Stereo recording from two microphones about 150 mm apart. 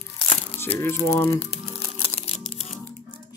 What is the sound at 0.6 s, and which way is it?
Speech, 15° left (ahead or behind).